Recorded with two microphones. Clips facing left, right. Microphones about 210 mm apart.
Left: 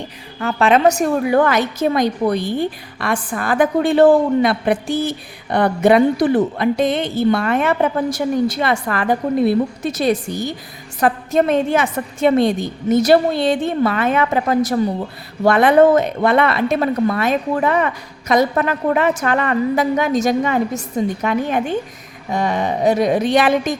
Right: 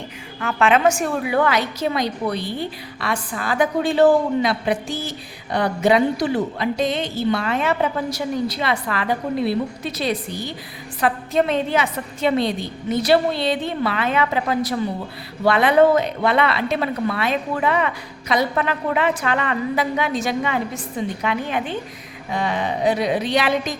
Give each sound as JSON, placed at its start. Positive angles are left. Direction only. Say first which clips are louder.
{"t": 0.3, "sound": "a woman's voice", "louder": "left 3 dB", "side_deg": 35}